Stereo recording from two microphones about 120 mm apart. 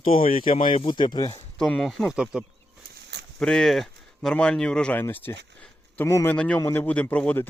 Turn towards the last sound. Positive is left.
turn(degrees=15)  # may be behind; listen again after turning